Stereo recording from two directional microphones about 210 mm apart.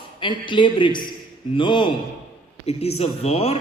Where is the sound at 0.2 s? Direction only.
20° left (ahead or behind).